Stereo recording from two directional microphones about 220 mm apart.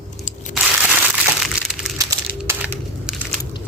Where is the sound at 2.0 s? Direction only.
15° right (ahead or behind).